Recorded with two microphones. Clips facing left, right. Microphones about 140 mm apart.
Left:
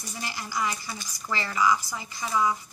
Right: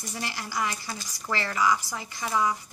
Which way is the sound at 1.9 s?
75° right (ahead or behind).